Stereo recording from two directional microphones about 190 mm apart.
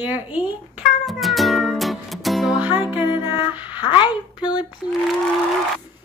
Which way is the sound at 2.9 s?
10° right (ahead or behind).